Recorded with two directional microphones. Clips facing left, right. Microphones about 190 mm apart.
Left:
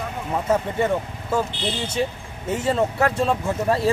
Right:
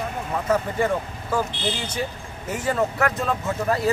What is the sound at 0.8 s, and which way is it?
Speech, 25° left (ahead or behind).